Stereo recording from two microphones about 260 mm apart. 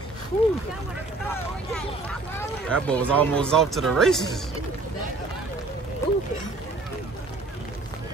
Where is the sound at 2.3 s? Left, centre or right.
Centre.